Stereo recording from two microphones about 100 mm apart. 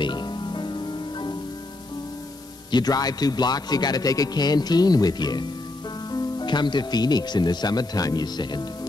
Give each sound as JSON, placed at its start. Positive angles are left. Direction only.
{"t": 0.0, "sound": "music", "side_deg": 50}
{"t": 2.7, "sound": "a man's voice", "side_deg": 40}